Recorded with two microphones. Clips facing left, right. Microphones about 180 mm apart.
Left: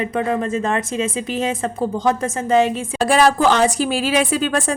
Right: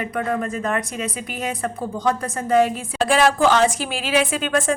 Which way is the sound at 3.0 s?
40° left (ahead or behind).